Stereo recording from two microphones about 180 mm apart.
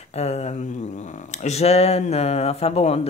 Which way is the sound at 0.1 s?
35° left (ahead or behind).